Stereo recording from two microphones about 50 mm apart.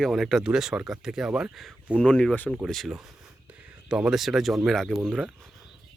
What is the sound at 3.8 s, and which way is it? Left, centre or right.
Speech, centre.